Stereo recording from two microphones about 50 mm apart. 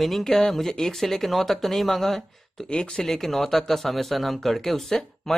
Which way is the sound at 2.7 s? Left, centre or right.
Centre.